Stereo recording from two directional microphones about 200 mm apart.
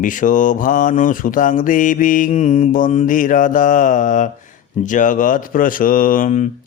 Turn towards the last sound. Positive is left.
turn(degrees=40)  # may be behind; listen again after turning